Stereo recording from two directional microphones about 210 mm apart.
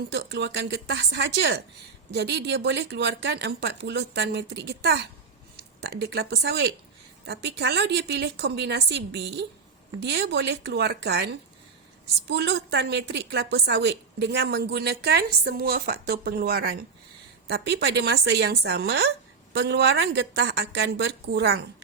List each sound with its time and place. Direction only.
0.1 s a woman's voice: 50° right (ahead or behind)